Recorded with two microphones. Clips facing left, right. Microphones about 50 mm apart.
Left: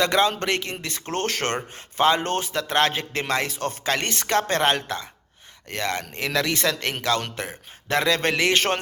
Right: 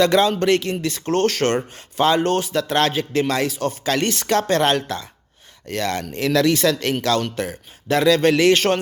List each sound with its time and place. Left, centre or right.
0.0 s a man's voice: left
1.0 s a man's voice: left
3.5 s a man's voice: left
3.8 s a man's voice: left